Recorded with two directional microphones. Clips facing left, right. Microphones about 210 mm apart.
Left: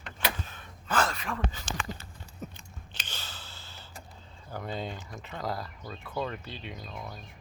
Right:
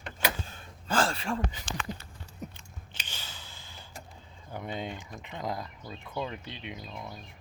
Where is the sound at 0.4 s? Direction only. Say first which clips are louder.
Right 1 dB; 30° right (ahead or behind).